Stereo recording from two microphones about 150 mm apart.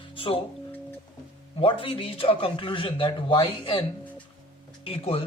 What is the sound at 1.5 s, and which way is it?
Speech, 35° left (ahead or behind).